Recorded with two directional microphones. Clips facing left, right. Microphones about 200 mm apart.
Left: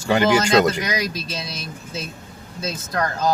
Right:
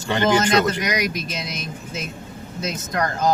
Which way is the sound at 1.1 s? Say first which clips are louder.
Right 1 dB; 20° right (ahead or behind).